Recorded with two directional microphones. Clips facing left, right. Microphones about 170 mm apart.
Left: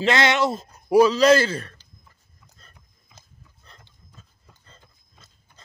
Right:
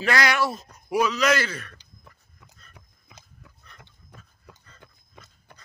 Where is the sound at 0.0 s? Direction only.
25° left (ahead or behind).